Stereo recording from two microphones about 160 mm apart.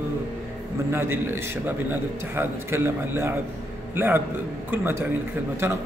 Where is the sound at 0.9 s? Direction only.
15° right (ahead or behind).